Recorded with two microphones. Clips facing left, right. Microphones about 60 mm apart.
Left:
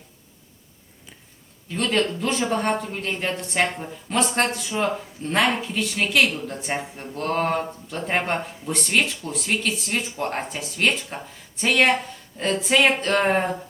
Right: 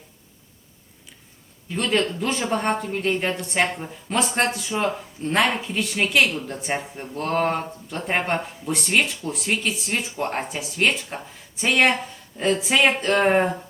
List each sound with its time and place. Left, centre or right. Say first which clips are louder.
1.8 s speech: even; centre
4.7 s speech: even; centre
5.3 s speech: even; centre